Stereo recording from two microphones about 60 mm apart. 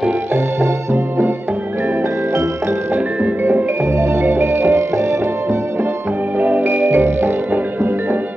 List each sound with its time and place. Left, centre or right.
0.3 s music: right
3.2 s music: right
3.8 s music: right
4.2 s music: right
6.3 s music: right